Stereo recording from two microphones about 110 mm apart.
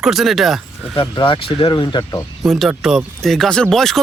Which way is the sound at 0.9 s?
50° left (ahead or behind).